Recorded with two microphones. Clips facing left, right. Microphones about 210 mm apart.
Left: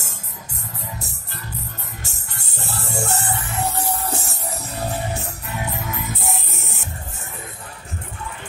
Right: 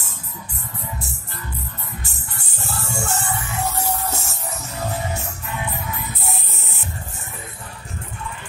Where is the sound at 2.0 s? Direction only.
40° left (ahead or behind).